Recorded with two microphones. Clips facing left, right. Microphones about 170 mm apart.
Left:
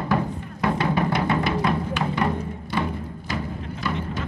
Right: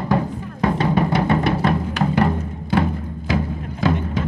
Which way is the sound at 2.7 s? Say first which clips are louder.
Right 7 dB; 70° right (ahead or behind).